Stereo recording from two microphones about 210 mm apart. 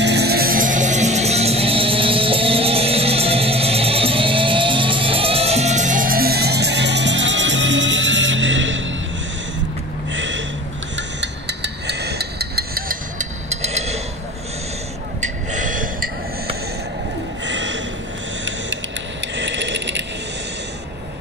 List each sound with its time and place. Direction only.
0.0 s music: 50° right (ahead or behind)
10.1 s a sound: 60° right (ahead or behind); by 14.0 s 30° right (ahead or behind)
15.1 s gasp: 35° right (ahead or behind)
17.5 s snort: 60° right (ahead or behind)
19.2 s ratchet: 60° right (ahead or behind)